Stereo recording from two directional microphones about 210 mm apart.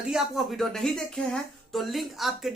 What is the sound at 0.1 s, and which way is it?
Speech, centre (ahead or behind).